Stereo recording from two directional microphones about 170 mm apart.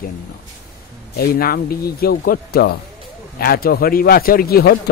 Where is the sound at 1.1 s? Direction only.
65° left (ahead or behind).